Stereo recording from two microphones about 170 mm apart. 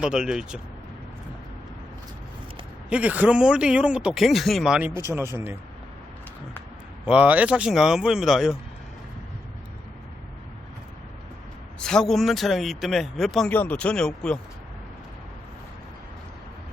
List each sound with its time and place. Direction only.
0.0 s a man's voice: 5° right (ahead or behind)
2.9 s a man's voice: 10° right (ahead or behind)
4.9 s speech: 15° right (ahead or behind)
7.0 s a man's voice: 5° right (ahead or behind)
11.8 s a man's voice: 5° left (ahead or behind)